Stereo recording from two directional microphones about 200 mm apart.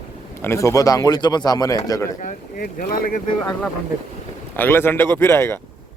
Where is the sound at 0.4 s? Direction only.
15° left (ahead or behind).